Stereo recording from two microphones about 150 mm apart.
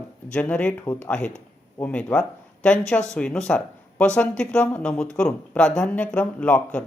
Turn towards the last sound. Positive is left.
turn(degrees=10)  # may be behind; listen again after turning